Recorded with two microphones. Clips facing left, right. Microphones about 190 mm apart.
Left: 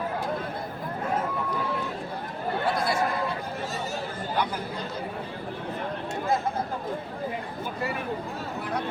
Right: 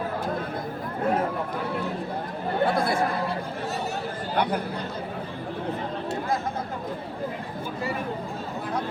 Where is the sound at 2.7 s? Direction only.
55° right (ahead or behind).